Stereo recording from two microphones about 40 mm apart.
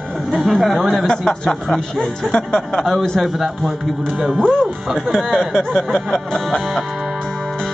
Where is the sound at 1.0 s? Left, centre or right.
Centre.